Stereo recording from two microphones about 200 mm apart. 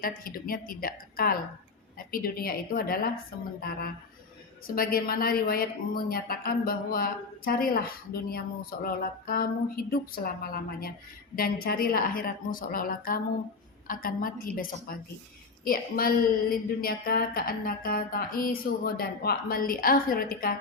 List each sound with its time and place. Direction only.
0.3 s speech: 45° left (ahead or behind)